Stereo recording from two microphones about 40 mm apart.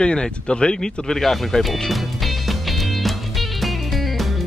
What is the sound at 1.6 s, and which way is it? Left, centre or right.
Music, centre.